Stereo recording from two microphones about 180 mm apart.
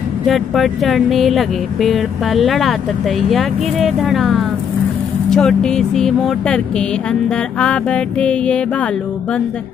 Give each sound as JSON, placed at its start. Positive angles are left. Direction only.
{"t": 0.3, "sound": "speech", "side_deg": 0}